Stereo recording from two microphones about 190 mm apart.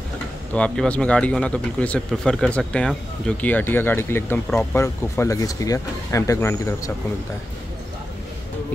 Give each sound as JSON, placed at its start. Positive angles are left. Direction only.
{"t": 0.5, "sound": "speech", "side_deg": 5}